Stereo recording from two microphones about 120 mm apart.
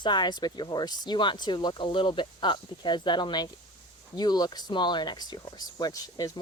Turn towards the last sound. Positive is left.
turn(degrees=30)  # may be behind; listen again after turning